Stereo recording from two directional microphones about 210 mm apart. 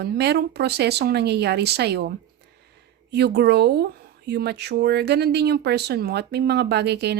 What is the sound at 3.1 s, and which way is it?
Speech, 50° right (ahead or behind).